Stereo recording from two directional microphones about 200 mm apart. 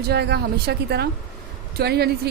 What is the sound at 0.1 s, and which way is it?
A woman's voice, 55° right (ahead or behind).